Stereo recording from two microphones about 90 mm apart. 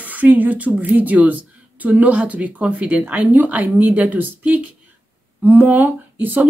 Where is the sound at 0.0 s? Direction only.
20° right (ahead or behind).